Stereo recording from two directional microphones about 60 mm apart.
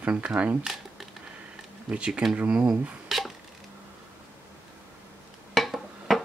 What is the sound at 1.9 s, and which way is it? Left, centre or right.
Speech, centre.